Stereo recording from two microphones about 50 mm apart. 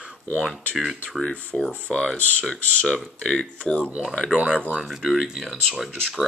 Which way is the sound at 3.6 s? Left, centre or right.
Left.